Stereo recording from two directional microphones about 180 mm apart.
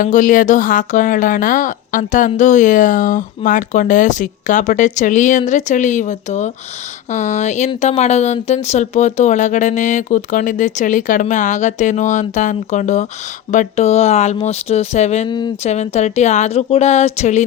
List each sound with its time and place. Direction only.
0.0 s a woman's voice: 45° left (ahead or behind)